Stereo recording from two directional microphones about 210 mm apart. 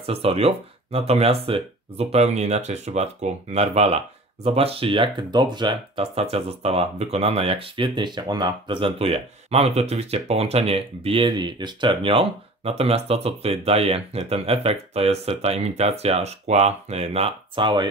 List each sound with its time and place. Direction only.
0.0 s speech: 30° right (ahead or behind)